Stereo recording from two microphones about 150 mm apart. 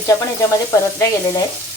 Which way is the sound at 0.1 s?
20° left (ahead or behind).